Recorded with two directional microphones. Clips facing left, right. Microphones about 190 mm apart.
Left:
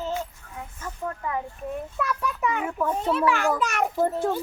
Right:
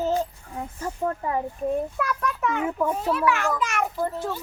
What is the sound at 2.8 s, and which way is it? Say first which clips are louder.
Speech: left 1 dB; 10° right (ahead or behind).